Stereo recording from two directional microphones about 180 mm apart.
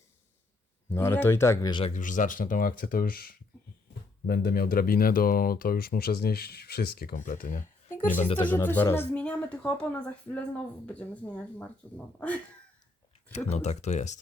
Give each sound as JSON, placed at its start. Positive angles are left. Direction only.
{"t": 0.9, "sound": "speech", "side_deg": 15}
{"t": 1.9, "sound": "speech", "side_deg": 45}
{"t": 8.4, "sound": "speech", "side_deg": 10}
{"t": 13.3, "sound": "speech", "side_deg": 40}